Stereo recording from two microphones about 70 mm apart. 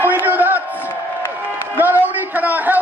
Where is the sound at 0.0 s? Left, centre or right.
Right.